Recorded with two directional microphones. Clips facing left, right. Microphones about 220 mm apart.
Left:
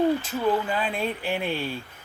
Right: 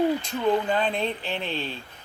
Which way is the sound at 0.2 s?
5° left (ahead or behind).